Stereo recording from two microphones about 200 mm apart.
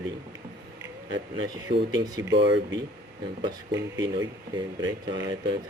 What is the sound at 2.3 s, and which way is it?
Speech, 60° right (ahead or behind).